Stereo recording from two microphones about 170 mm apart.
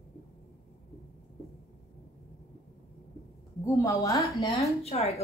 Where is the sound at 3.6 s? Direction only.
20° left (ahead or behind).